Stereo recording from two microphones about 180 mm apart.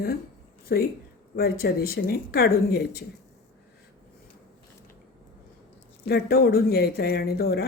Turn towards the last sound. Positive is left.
turn(degrees=60)  # may be behind; listen again after turning